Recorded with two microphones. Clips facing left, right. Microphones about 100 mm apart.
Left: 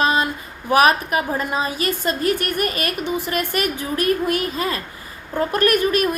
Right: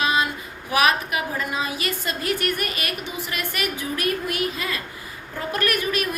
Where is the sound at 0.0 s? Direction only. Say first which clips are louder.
Left 3 dB; 40° left (ahead or behind).